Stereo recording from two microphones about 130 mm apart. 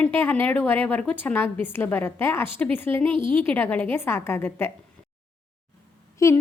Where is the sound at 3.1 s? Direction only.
40° right (ahead or behind).